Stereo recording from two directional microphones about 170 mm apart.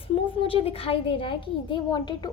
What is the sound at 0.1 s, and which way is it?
A woman's voice, 30° left (ahead or behind).